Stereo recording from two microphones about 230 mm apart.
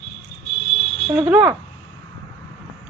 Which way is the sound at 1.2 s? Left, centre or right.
Centre.